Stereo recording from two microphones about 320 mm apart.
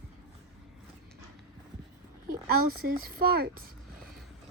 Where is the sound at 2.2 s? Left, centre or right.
Right.